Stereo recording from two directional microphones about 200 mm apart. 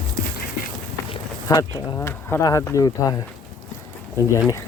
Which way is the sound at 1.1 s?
20° left (ahead or behind).